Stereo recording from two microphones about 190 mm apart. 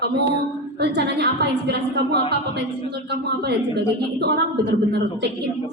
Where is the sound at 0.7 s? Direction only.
60° right (ahead or behind).